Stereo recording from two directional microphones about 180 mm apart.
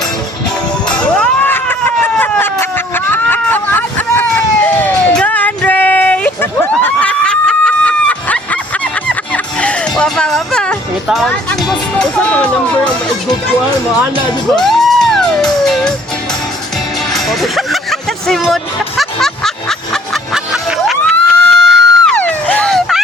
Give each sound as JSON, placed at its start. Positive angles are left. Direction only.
{"t": 0.9, "sound": "a sound", "side_deg": 5}
{"t": 9.0, "sound": "music", "side_deg": 5}
{"t": 14.6, "sound": "music", "side_deg": 0}
{"t": 17.2, "sound": "music", "side_deg": 0}
{"t": 21.0, "sound": "a sound", "side_deg": 0}
{"t": 21.6, "sound": "music", "side_deg": -75}
{"t": 22.0, "sound": "music", "side_deg": 5}